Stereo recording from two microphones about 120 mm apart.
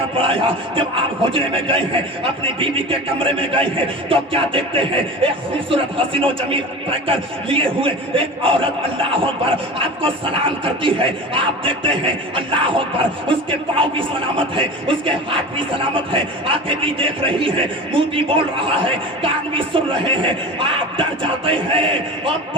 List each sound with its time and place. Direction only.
0.2 s speech: 45° right (ahead or behind)